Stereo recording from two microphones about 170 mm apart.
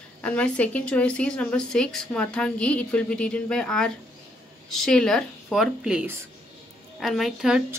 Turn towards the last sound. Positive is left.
turn(degrees=0)  # may be behind; listen again after turning